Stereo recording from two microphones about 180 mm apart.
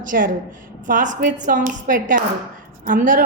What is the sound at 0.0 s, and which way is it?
A woman's voice, 50° right (ahead or behind).